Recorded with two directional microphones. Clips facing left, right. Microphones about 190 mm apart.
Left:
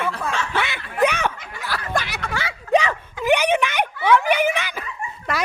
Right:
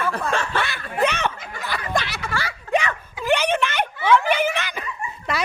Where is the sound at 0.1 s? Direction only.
55° right (ahead or behind).